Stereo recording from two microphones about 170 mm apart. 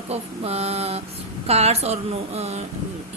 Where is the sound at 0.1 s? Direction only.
35° right (ahead or behind).